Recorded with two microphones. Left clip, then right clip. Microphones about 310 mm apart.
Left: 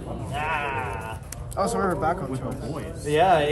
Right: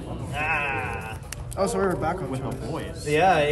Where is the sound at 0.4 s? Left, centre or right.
Left.